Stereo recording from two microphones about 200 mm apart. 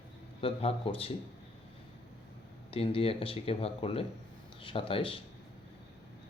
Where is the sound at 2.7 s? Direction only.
30° left (ahead or behind).